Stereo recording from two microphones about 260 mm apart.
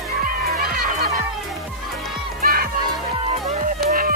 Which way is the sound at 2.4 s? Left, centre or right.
Right.